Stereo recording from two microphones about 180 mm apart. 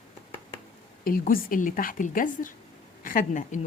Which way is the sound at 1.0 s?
50° left (ahead or behind).